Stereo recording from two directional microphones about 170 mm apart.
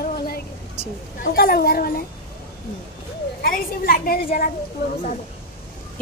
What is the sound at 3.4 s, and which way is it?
A woman's voice, 60° left (ahead or behind).